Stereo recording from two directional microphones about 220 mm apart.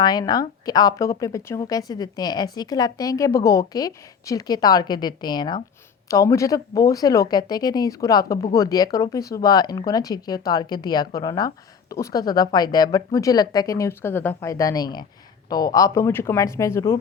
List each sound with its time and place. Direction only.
0.0 s speech: 20° left (ahead or behind)